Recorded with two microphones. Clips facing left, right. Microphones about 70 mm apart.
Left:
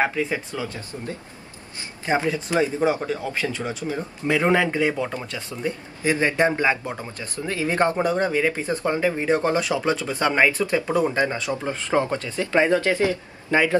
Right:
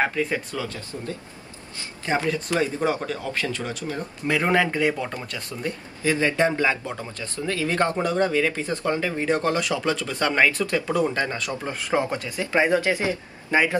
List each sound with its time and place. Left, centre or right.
0.0 s speech: centre
4.3 s speech: centre
12.0 s speech: centre